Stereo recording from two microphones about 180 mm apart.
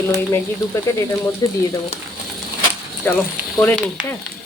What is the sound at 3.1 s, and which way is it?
Speech, 5° left (ahead or behind).